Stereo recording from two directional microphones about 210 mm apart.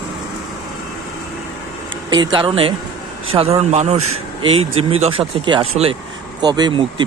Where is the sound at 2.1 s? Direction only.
20° right (ahead or behind).